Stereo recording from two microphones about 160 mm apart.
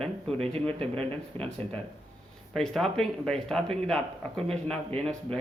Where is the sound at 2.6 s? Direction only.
Centre (ahead or behind).